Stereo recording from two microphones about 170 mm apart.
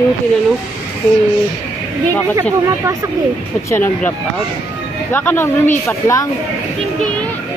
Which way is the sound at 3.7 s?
15° left (ahead or behind).